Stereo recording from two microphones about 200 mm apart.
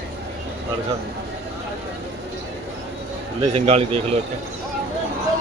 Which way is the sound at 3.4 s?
30° right (ahead or behind).